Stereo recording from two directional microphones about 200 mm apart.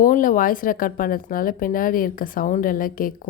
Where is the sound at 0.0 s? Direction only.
45° left (ahead or behind).